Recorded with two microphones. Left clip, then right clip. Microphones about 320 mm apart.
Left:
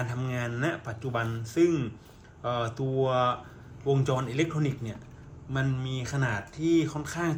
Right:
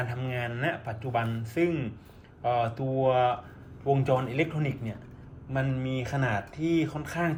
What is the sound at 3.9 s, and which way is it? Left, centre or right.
Speech, centre.